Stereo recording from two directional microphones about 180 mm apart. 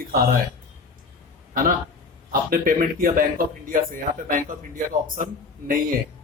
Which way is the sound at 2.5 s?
50° right (ahead or behind).